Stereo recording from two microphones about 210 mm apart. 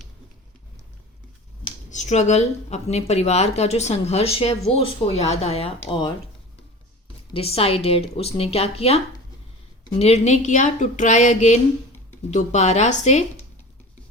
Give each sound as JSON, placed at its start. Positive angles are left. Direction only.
{"t": 1.9, "sound": "speech", "side_deg": 35}
{"t": 7.3, "sound": "speech", "side_deg": 25}
{"t": 10.0, "sound": "speech", "side_deg": 30}